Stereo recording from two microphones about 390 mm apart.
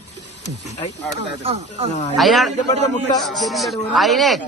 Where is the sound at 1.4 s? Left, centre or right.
Centre.